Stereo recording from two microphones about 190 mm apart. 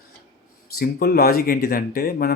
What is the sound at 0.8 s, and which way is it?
Speech, 55° left (ahead or behind).